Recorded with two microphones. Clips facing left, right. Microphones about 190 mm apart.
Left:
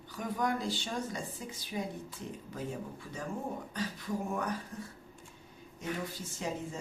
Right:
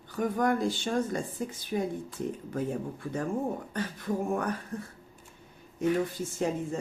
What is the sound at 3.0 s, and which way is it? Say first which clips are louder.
A woman's voice: right 9 dB; 55° right (ahead or behind).